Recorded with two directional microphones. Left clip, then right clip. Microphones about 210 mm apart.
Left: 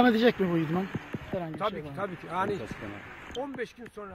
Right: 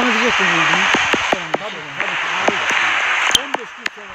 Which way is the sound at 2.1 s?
50° right (ahead or behind).